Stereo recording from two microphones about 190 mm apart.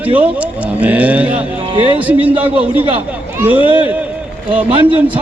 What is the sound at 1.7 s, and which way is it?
Speech, 30° right (ahead or behind).